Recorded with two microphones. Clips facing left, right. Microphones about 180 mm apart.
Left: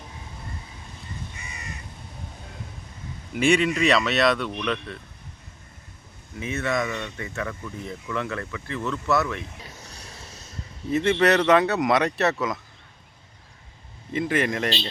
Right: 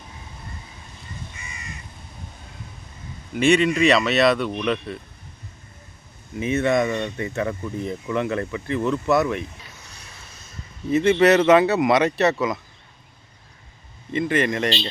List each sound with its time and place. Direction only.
3.3 s speech: 5° left (ahead or behind)
6.3 s speech: 20° right (ahead or behind)
9.8 s a sound: 40° left (ahead or behind)
10.9 s speech: centre (ahead or behind)
14.1 s speech: 5° left (ahead or behind)